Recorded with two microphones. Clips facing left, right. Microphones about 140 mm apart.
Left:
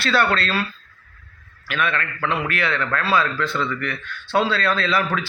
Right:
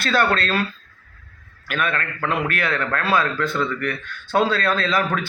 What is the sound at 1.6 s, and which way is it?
A man's voice, 45° right (ahead or behind).